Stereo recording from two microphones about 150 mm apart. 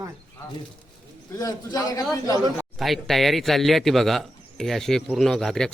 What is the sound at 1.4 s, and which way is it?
A man's voice, 25° left (ahead or behind).